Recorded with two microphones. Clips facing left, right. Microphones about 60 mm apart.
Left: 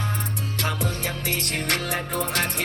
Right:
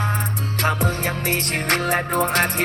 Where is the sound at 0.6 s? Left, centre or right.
Right.